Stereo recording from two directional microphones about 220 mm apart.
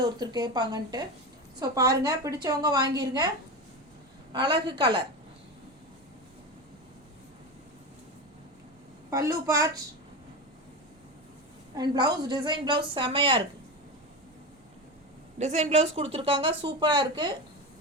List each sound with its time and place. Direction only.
0.0 s a woman's voice: 20° right (ahead or behind)
4.3 s a woman's voice: 20° right (ahead or behind)
9.0 s a woman's voice: 15° right (ahead or behind)
11.8 s speech: 20° right (ahead or behind)
15.4 s speech: 30° right (ahead or behind)